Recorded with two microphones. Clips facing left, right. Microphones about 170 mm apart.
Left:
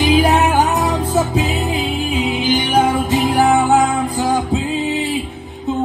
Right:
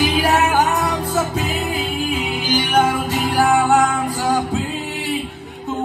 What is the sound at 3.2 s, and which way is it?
Music, centre (ahead or behind).